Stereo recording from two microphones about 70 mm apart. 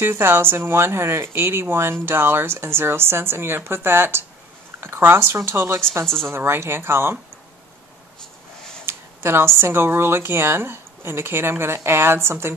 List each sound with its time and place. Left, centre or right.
0.0 s speech: right
8.8 s a sound: right
9.6 s speech: right